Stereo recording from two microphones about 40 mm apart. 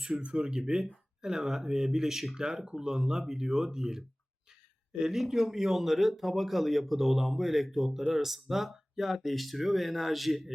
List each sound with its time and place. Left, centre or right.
0.2 s speech: right
0.4 s speech: centre
5.1 s speech: centre